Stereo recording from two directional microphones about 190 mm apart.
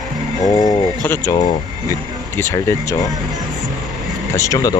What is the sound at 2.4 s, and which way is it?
Speech, 15° left (ahead or behind).